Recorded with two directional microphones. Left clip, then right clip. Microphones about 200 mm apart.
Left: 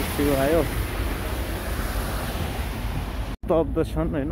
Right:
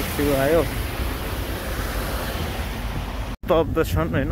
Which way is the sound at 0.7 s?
65° right (ahead or behind).